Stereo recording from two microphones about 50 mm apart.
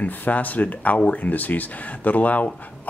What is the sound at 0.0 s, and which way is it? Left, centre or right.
Speech, left.